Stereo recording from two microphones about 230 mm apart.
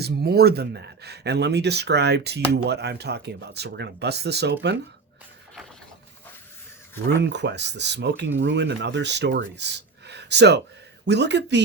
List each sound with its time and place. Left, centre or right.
0.0 s speech: right
7.2 s speech: right
10.1 s a sound: right
11.0 s speech: right